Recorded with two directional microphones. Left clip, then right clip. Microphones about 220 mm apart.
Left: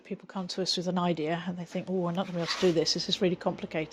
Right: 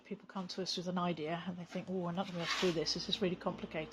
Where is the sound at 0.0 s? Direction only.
40° left (ahead or behind).